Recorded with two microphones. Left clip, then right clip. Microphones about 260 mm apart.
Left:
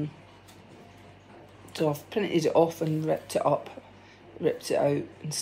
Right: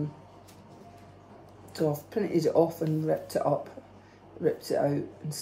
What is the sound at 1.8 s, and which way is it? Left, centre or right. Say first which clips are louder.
Speech: left 1 dB; left.